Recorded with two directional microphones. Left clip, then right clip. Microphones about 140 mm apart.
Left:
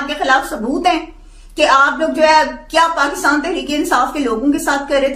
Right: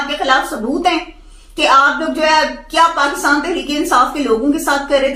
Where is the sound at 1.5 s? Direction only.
30° left (ahead or behind).